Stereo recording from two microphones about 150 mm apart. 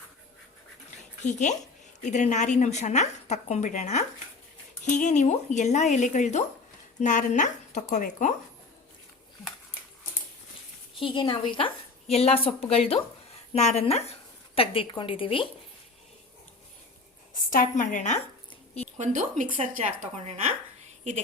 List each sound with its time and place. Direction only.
1.2 s a woman's voice: 55° left (ahead or behind)
11.0 s a woman's voice: 35° left (ahead or behind)
17.3 s a woman's voice: 65° left (ahead or behind)
18.9 s speech: 50° right (ahead or behind)